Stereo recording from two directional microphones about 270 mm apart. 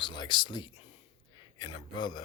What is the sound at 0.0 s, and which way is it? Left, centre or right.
Speech, centre.